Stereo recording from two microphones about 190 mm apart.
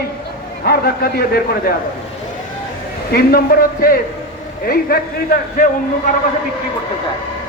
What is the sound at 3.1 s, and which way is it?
A man's voice, 55° left (ahead or behind).